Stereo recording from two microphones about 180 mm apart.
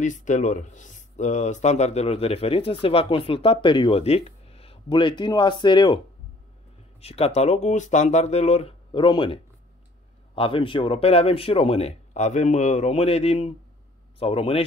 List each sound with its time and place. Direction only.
0.0 s speech: 40° left (ahead or behind); by 5.9 s 25° left (ahead or behind)
7.0 s speech: 35° left (ahead or behind)